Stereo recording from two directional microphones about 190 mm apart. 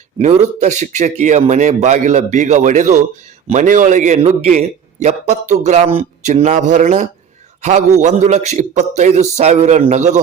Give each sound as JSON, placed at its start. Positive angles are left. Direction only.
{"t": 0.2, "sound": "a man's voice", "side_deg": -40}